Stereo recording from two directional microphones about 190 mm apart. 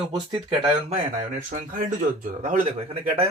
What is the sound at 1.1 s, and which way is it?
A man's voice, 45° right (ahead or behind).